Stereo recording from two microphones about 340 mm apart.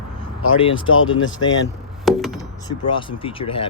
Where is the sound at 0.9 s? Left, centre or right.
Left.